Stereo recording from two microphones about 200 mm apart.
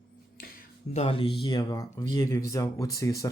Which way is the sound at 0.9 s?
30° left (ahead or behind).